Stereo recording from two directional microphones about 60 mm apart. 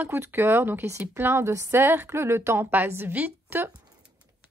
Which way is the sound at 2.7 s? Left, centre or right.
Right.